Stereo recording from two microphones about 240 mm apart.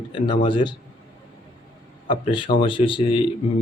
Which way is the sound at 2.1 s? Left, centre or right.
Left.